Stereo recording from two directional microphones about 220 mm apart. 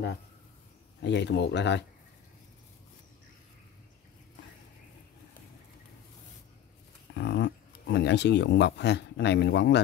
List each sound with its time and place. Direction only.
1.0 s speech: 50° left (ahead or behind)
7.2 s speech: 50° left (ahead or behind)